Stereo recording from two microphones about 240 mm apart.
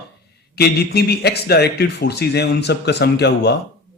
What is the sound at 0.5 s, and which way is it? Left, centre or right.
Speech, left.